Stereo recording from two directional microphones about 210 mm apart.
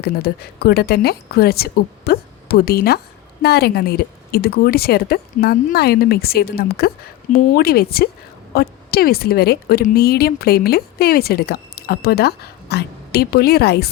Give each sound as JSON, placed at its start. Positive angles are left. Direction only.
{"t": 0.0, "sound": "a woman's voice", "side_deg": 50}